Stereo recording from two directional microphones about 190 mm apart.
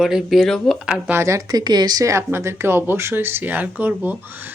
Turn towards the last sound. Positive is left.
turn(degrees=-10)  # may be behind; listen again after turning